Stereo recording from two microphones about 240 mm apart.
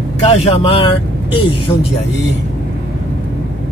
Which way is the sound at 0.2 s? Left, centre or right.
Left.